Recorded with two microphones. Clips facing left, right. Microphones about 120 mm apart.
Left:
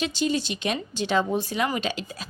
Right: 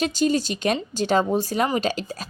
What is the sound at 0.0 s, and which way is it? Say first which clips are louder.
A woman's voice: right 4 dB; 40° right (ahead or behind).